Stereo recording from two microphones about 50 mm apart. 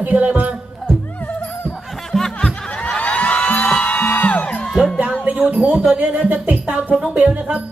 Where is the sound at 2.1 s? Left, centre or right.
Centre.